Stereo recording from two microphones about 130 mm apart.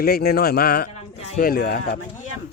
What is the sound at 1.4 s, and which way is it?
Speech, 90° left.